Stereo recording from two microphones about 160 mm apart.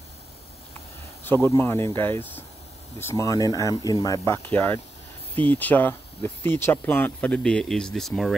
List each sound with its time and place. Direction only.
1.2 s speech: 15° left (ahead or behind)
5.5 s speech: 10° left (ahead or behind)